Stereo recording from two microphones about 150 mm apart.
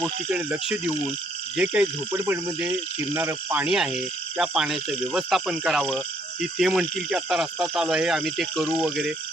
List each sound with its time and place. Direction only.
0.0 s speech: 10° right (ahead or behind)
8.6 s speech: 15° right (ahead or behind)